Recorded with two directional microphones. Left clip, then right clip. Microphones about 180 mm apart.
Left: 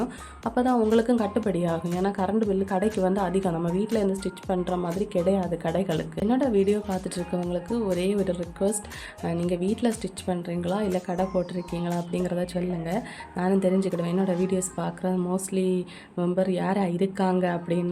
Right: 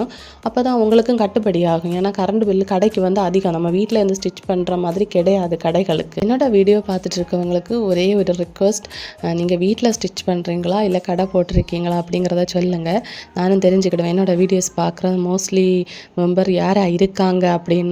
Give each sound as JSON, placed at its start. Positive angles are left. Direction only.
{"t": 0.0, "sound": "speech", "side_deg": -35}